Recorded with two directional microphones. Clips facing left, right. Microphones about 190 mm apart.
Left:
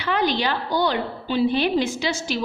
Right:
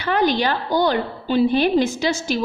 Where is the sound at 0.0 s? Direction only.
45° right (ahead or behind).